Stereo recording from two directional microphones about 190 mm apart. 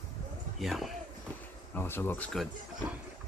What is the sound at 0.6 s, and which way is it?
Speech, centre (ahead or behind).